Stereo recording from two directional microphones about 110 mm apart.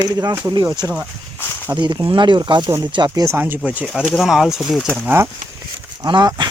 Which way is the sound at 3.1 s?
25° right (ahead or behind).